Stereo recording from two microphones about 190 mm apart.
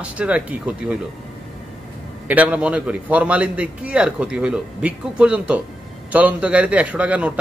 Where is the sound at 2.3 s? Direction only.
5° right (ahead or behind).